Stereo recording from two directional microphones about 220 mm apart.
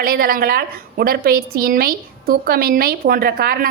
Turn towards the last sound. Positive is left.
turn(degrees=-45)  # may be behind; listen again after turning